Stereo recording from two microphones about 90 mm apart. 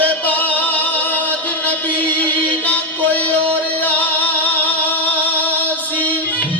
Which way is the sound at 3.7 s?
20° left (ahead or behind).